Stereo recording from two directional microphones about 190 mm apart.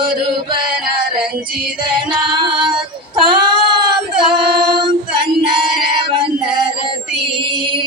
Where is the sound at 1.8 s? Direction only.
25° right (ahead or behind).